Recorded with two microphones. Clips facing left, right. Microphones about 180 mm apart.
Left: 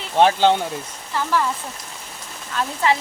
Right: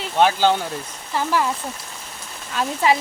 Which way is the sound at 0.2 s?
25° left (ahead or behind).